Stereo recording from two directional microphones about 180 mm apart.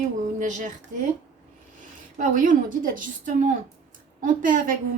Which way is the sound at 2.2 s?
45° right (ahead or behind).